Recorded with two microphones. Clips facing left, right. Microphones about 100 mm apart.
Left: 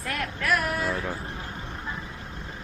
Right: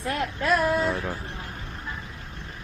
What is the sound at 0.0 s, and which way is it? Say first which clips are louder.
Child singing: right 3 dB; 25° right (ahead or behind).